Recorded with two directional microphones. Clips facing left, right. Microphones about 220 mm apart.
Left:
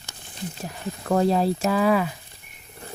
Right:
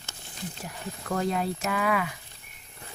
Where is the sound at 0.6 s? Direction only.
30° left (ahead or behind).